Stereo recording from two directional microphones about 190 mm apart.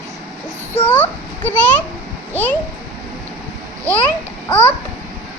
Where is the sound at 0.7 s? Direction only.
10° left (ahead or behind).